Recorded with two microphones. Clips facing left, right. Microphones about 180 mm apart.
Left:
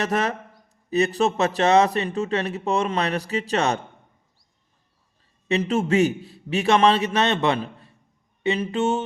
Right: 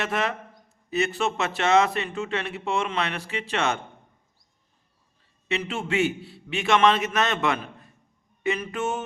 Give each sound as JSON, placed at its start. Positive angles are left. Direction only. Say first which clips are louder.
{"t": 0.0, "sound": "a man's voice", "louder": "left 3 dB", "side_deg": 40}
{"t": 5.5, "sound": "a man's voice", "louder": "left 7 dB", "side_deg": 40}